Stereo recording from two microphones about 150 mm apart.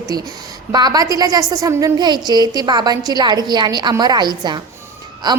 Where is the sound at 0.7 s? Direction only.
25° right (ahead or behind).